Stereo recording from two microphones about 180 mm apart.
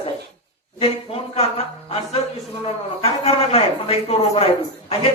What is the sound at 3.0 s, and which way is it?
A man's voice, 35° left (ahead or behind).